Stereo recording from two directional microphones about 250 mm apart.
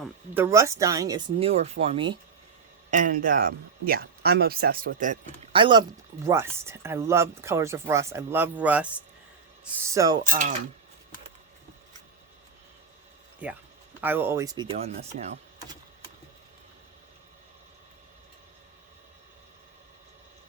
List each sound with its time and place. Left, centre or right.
0.0 s speech: centre
2.9 s speech: right
5.5 s speech: centre
10.2 s speech: right
14.0 s speech: centre